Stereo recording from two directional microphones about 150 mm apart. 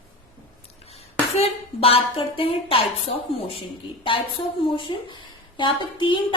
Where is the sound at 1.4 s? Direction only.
40° left (ahead or behind).